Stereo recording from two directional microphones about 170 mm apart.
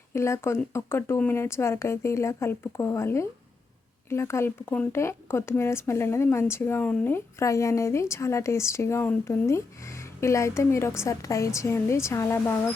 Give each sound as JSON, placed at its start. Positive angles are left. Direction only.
{"t": 0.1, "sound": "speech", "side_deg": 15}